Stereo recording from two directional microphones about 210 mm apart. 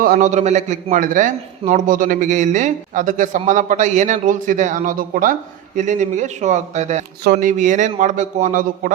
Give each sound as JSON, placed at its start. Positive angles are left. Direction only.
{"t": 0.0, "sound": "a man's voice", "side_deg": -40}